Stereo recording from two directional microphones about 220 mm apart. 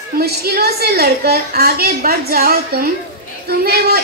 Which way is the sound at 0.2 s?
45° right (ahead or behind).